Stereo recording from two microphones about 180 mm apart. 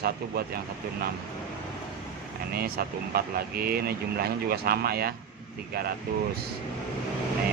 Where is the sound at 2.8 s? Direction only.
60° right (ahead or behind).